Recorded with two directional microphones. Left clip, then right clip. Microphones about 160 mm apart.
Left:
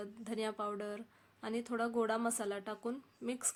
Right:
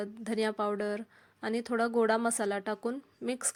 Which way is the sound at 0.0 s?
40° right (ahead or behind).